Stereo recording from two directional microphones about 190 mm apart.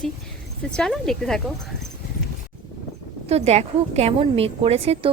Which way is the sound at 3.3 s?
35° right (ahead or behind).